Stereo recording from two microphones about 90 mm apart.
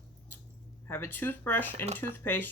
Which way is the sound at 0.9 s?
25° left (ahead or behind).